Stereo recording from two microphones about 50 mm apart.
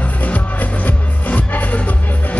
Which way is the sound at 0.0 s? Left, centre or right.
Left.